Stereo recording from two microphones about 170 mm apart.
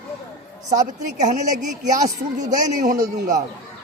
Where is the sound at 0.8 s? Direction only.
45° right (ahead or behind).